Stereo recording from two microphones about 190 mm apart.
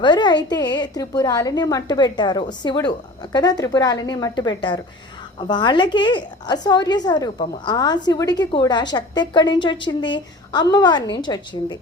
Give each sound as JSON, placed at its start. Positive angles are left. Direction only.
{"t": 0.0, "sound": "a woman's voice", "side_deg": 25}